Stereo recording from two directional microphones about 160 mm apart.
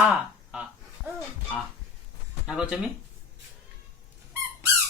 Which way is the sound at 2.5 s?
5° right (ahead or behind).